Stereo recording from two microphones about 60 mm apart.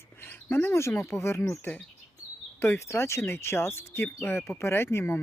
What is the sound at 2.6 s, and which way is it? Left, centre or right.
Speech, left.